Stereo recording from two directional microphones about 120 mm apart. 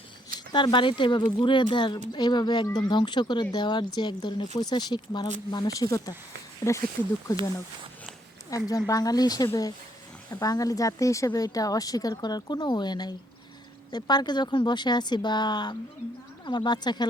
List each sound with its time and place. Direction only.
0.3 s speech: 40° left (ahead or behind); by 6.8 s 25° left (ahead or behind)
8.4 s speech: 30° left (ahead or behind)